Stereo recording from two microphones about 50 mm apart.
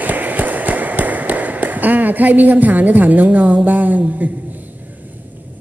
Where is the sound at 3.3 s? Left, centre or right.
Right.